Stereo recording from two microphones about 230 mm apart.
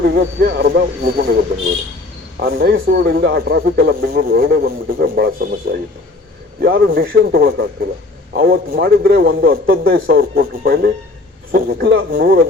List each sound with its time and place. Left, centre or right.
0.0 s speech: right
2.4 s speech: right
6.6 s speech: right